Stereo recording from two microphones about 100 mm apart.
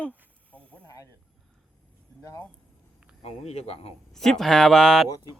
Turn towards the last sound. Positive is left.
turn(degrees=0)  # may be behind; listen again after turning